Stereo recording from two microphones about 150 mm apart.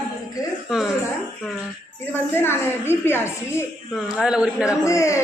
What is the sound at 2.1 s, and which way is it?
Speech, 15° left (ahead or behind).